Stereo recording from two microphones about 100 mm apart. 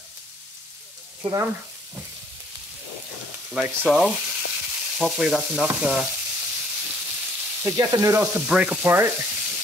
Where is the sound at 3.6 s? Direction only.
10° right (ahead or behind).